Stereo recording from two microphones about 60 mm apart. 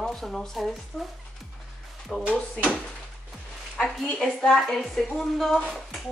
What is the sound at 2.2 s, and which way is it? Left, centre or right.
Speech, centre.